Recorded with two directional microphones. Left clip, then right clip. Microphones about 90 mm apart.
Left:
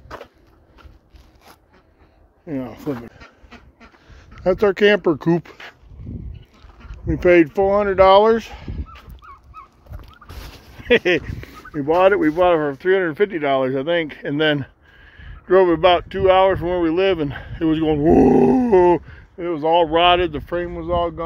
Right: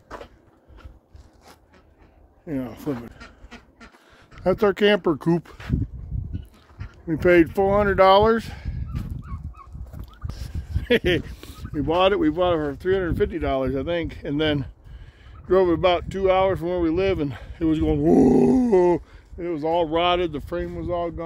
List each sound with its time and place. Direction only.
2.4 s speech: 5° left (ahead or behind)
3.2 s goat: 45° left (ahead or behind)
4.4 s speech: 20° right (ahead or behind)
6.9 s speech: 25° right (ahead or behind)
7.6 s speech: 40° right (ahead or behind); by 8.8 s 5° right (ahead or behind)
10.8 s speech: 20° right (ahead or behind)
12.3 s speech: 15° right (ahead or behind)